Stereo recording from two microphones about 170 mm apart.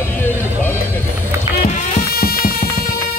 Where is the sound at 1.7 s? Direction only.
45° left (ahead or behind).